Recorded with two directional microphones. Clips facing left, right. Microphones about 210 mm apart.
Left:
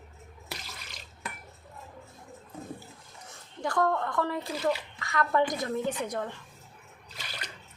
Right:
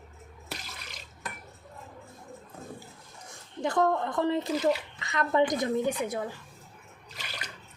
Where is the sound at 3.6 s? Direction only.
20° right (ahead or behind).